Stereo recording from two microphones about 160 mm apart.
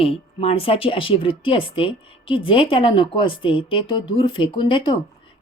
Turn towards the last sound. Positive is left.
turn(degrees=30)  # may be behind; listen again after turning